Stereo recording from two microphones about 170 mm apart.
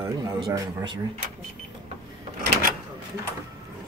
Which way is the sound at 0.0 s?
20° right (ahead or behind).